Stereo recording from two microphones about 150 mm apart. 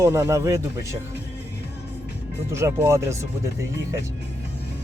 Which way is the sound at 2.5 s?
20° right (ahead or behind).